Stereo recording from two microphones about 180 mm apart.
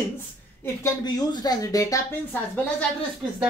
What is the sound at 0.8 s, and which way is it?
Speech, 20° left (ahead or behind).